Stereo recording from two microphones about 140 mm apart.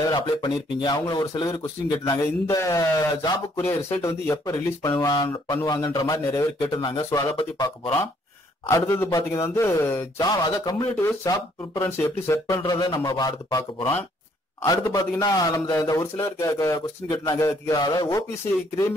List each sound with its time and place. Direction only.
0.1 s speech: 30° left (ahead or behind)
8.6 s speech: 20° left (ahead or behind)
11.0 s speech: 20° left (ahead or behind)